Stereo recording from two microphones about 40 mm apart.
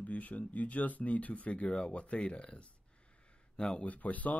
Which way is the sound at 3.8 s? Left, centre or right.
Left.